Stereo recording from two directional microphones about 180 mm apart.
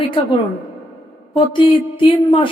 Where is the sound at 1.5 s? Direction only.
30° left (ahead or behind).